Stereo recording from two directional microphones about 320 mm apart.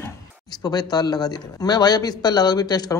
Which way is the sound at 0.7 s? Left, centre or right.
Centre.